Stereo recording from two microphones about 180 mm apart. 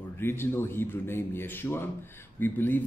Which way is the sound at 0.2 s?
10° left (ahead or behind).